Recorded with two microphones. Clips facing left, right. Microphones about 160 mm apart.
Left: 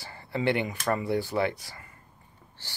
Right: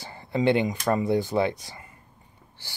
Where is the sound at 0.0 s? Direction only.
15° right (ahead or behind).